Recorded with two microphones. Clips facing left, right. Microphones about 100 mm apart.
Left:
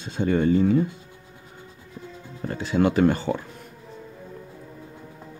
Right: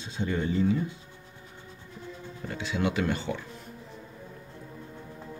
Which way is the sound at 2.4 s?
45° left (ahead or behind).